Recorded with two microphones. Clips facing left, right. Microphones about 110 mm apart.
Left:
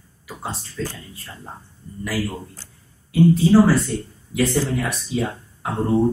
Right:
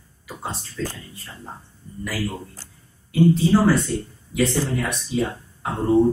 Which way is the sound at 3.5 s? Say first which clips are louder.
Left 3 dB; centre (ahead or behind).